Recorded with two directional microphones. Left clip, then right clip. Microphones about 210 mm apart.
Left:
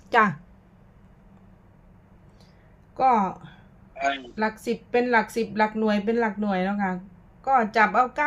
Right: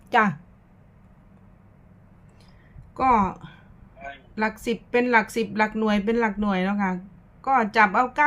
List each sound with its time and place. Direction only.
0.1 s speech: centre (ahead or behind)
2.9 s a woman's voice: 10° right (ahead or behind)
3.9 s a sound: 55° left (ahead or behind)
4.4 s a woman's voice: 10° right (ahead or behind)